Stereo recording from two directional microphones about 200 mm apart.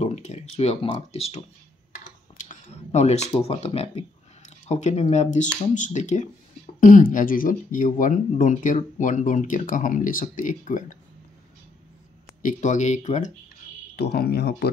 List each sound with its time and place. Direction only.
0.0 s speech: 35° left (ahead or behind)
2.3 s a sound: 35° left (ahead or behind)
3.3 s speech: 30° left (ahead or behind)
12.4 s speech: 40° left (ahead or behind)
13.9 s speech: 50° left (ahead or behind)